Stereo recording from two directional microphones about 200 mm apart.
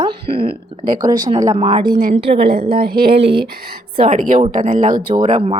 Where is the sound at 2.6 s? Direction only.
50° right (ahead or behind).